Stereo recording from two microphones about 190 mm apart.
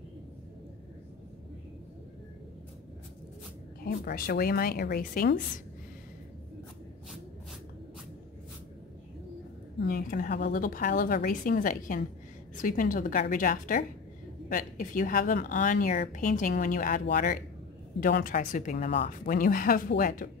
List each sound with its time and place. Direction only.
3.8 s a woman's voice: 50° left (ahead or behind)
9.8 s a woman's voice: 45° left (ahead or behind)